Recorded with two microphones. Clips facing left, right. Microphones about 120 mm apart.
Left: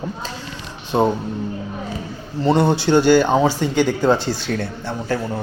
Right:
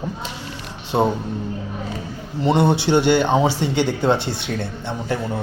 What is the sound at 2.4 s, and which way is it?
Speech, 25° right (ahead or behind).